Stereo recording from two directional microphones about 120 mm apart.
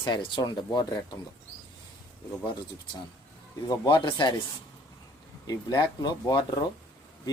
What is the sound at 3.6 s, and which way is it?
Speech, 35° left (ahead or behind).